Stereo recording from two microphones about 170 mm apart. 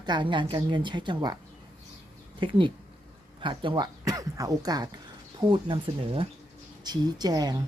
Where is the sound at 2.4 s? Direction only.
30° right (ahead or behind).